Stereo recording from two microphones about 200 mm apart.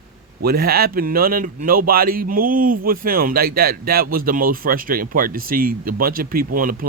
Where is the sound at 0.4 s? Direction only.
50° right (ahead or behind).